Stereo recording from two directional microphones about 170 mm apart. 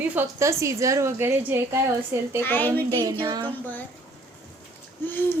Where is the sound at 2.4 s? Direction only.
10° left (ahead or behind).